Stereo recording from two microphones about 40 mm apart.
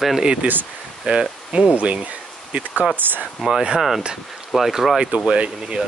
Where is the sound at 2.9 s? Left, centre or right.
Right.